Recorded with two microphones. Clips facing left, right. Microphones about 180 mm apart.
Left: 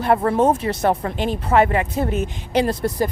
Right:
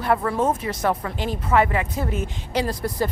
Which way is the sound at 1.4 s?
25° left (ahead or behind).